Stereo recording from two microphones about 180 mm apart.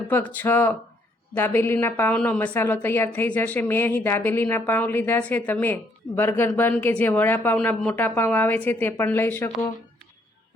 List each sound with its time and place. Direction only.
0.1 s a woman's voice: 10° left (ahead or behind)